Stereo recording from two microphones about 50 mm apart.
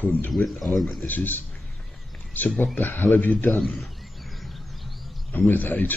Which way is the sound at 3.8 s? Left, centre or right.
Centre.